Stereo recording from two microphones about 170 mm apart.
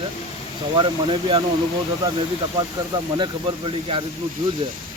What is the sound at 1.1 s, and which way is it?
Speech, 35° right (ahead or behind).